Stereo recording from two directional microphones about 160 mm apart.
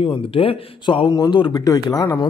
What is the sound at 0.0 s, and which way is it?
Speech, 35° left (ahead or behind).